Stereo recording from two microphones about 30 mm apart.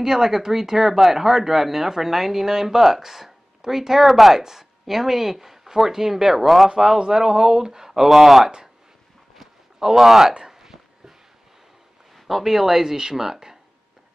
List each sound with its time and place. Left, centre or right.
0.0 s speech: centre
4.4 s speech: centre
7.1 s speech: right
8.1 s speech: centre
9.9 s speech: centre
10.4 s a sound: centre
12.3 s speech: centre